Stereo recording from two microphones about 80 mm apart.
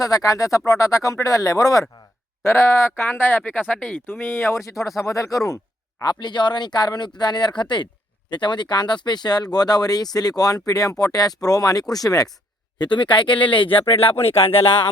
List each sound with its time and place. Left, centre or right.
0.0 s speech: left
2.4 s speech: left
4.6 s speech: left
6.0 s speech: left
12.8 s speech: left
14.2 s speech: left